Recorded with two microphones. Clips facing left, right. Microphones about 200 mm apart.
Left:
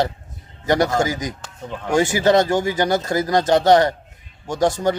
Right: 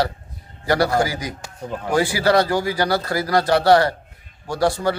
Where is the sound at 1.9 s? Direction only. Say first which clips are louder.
Left 2 dB; 20° left (ahead or behind).